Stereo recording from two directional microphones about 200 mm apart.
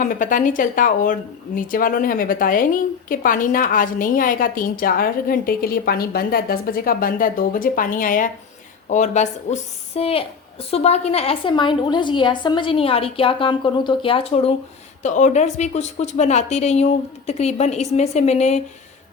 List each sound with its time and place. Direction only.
0.0 s a woman's voice: 40° left (ahead or behind)